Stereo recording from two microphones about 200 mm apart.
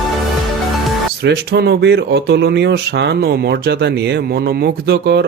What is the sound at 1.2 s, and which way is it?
Speech, 55° right (ahead or behind).